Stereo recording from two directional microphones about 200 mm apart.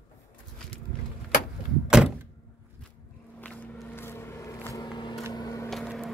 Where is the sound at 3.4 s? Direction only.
5° left (ahead or behind).